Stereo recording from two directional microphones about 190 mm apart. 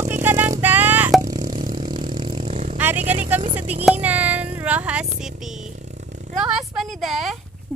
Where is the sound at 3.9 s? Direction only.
10° right (ahead or behind).